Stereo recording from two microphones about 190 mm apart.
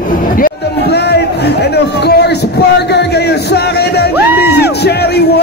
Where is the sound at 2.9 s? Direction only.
60° left (ahead or behind).